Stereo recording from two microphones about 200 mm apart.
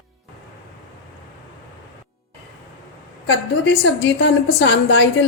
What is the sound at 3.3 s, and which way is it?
A woman's voice, 60° left (ahead or behind).